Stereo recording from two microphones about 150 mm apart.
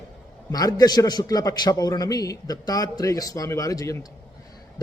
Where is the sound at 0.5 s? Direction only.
25° left (ahead or behind).